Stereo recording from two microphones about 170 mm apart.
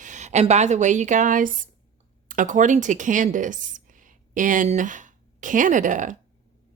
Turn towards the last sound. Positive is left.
turn(degrees=-50)  # may be behind; listen again after turning